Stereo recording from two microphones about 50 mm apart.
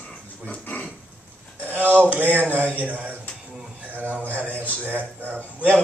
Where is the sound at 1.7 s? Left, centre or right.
Right.